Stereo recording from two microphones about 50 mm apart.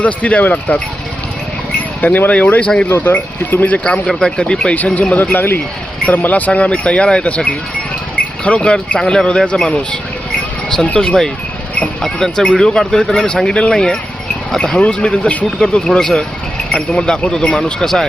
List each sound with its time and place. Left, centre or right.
0.0 s speech: left
2.0 s speech: left
3.0 s speech: left
3.8 s speech: centre
4.9 s speech: left
6.1 s speech: left
10.9 s speech: centre